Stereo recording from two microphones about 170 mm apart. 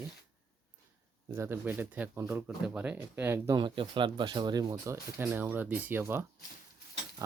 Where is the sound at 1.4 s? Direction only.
10° right (ahead or behind).